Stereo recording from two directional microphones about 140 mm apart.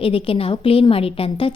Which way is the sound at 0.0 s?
40° left (ahead or behind).